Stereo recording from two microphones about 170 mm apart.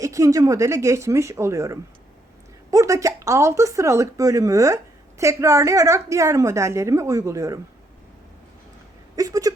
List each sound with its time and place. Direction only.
0.0 s speech: 20° right (ahead or behind)
9.1 s speech: 20° right (ahead or behind)